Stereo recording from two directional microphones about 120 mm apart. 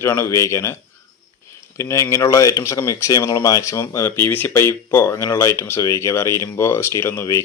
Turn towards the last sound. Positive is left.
turn(degrees=20)  # may be behind; listen again after turning